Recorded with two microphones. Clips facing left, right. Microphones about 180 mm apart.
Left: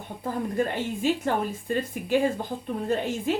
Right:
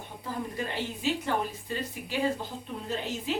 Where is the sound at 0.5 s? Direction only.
50° left (ahead or behind).